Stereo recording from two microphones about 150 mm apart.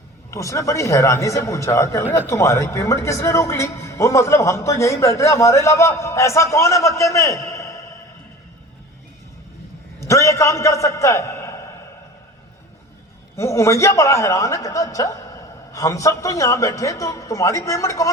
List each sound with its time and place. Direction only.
0.3 s speech: 20° left (ahead or behind)
10.0 s a man's voice: 20° left (ahead or behind)
13.3 s speech: 20° left (ahead or behind)